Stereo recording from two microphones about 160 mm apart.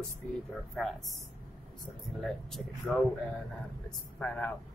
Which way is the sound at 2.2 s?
Centre (ahead or behind).